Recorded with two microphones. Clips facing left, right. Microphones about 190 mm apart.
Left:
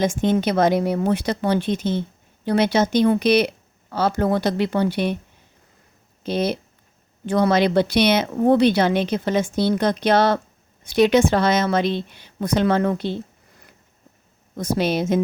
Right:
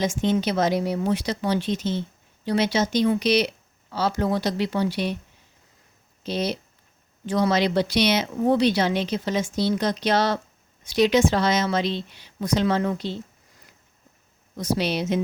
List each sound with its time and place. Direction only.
0.0 s speech: 50° left (ahead or behind)
6.2 s a woman's voice: 55° left (ahead or behind)
14.5 s a woman's voice: 50° left (ahead or behind)